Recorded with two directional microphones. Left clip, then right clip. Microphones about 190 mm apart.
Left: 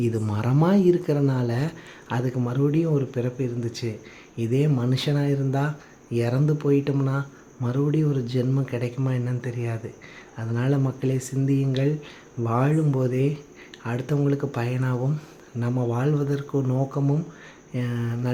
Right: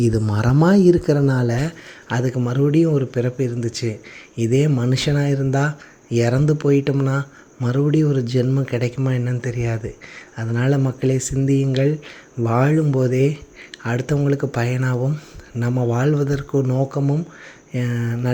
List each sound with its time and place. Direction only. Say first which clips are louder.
0.0 s speech: right 6 dB; 25° right (ahead or behind)